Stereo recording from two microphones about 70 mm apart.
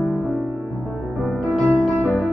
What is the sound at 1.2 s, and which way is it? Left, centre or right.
Music, centre.